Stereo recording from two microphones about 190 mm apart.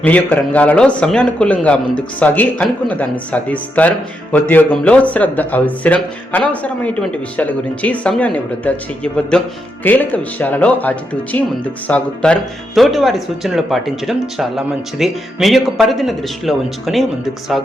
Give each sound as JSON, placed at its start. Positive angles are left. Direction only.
{"t": 0.0, "sound": "speech", "side_deg": 10}